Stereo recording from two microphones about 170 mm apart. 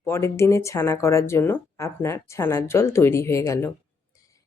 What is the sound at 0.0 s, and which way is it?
A woman's voice, 15° left (ahead or behind).